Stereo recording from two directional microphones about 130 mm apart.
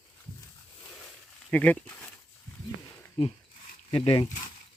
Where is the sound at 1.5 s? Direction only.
10° left (ahead or behind).